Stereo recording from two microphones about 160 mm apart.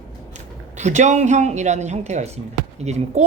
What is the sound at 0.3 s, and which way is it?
Speech, 45° right (ahead or behind).